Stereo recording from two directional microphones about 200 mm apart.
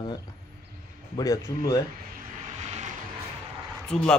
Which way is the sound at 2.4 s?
35° right (ahead or behind).